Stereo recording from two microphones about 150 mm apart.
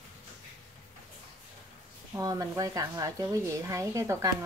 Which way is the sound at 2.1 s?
20° right (ahead or behind).